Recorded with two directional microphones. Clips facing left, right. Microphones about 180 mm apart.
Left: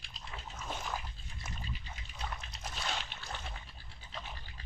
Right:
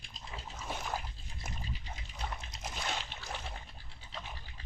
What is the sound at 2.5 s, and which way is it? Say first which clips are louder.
Dog: right 1 dB; 20° right (ahead or behind).